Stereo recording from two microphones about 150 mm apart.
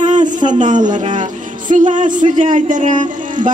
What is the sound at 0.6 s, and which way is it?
Speech, 55° right (ahead or behind).